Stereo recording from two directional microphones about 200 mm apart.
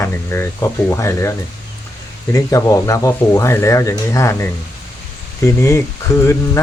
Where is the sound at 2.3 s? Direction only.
15° left (ahead or behind).